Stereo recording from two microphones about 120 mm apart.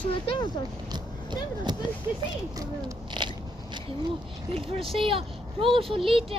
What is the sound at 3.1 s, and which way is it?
Biting, 40° right (ahead or behind).